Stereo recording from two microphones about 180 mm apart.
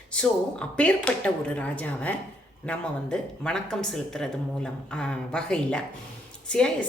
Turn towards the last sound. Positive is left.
turn(degrees=5)  # may be behind; listen again after turning